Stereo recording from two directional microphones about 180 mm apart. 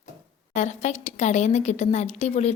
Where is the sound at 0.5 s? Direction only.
40° left (ahead or behind).